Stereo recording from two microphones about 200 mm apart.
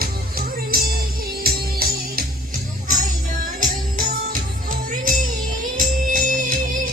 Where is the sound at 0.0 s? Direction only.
45° right (ahead or behind).